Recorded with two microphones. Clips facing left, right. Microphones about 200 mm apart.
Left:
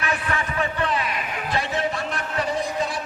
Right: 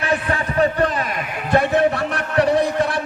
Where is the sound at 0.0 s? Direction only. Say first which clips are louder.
Right 5 dB; 35° right (ahead or behind).